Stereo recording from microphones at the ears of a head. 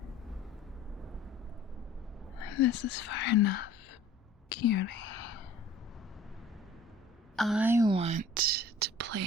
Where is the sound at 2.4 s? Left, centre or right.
Left.